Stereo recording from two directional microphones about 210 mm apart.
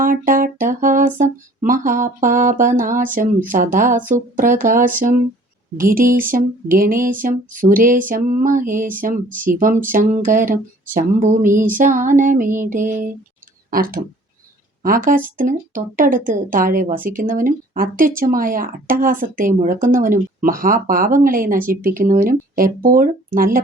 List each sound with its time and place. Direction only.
0.0 s speech: 40° right (ahead or behind)